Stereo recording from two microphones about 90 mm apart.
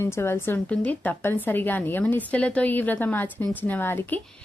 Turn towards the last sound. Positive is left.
turn(degrees=25)  # may be behind; listen again after turning